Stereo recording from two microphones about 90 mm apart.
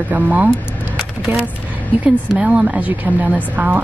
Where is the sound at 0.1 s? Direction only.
15° right (ahead or behind).